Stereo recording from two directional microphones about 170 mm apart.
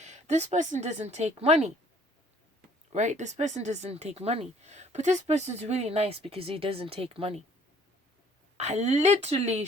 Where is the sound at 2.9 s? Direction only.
45° right (ahead or behind).